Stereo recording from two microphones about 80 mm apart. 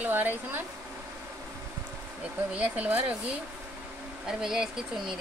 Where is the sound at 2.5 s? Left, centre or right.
Centre.